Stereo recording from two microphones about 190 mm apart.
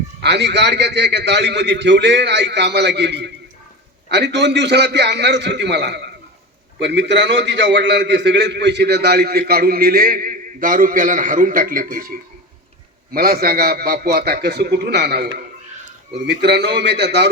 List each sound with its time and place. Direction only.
0.2 s a man's voice: 65° right (ahead or behind)